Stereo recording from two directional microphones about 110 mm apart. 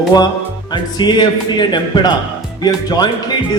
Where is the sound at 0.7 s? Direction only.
45° left (ahead or behind).